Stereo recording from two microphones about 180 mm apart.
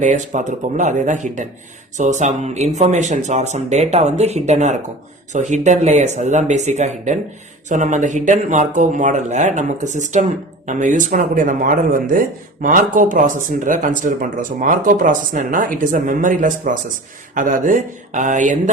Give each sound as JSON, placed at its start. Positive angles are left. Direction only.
{"t": 0.0, "sound": "speech", "side_deg": -40}